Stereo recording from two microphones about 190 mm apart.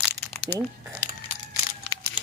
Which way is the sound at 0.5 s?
10° left (ahead or behind).